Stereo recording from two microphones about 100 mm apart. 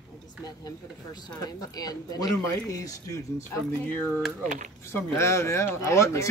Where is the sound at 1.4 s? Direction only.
40° left (ahead or behind).